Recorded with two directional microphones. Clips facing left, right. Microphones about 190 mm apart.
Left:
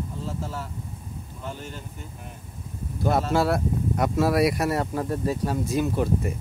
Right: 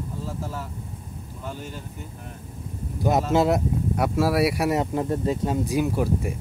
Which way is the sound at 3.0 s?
15° right (ahead or behind).